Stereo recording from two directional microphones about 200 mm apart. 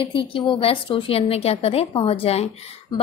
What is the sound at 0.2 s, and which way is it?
A woman's voice, 25° left (ahead or behind).